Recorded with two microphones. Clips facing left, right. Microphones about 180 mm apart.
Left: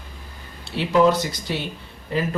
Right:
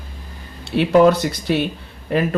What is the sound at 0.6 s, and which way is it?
Speech, 60° right (ahead or behind).